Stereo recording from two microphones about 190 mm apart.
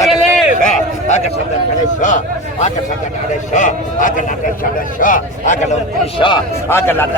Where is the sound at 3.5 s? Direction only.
40° left (ahead or behind).